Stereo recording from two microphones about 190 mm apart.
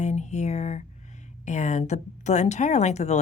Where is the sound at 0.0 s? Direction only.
35° left (ahead or behind).